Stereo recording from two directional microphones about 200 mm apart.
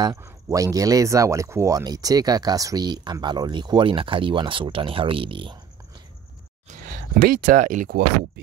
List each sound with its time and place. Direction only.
0.0 s speech: 20° right (ahead or behind)
6.7 s speech: 45° right (ahead or behind)